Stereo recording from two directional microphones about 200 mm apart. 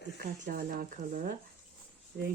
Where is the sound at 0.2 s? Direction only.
45° right (ahead or behind).